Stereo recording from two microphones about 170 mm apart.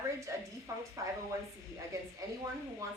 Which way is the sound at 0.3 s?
20° right (ahead or behind).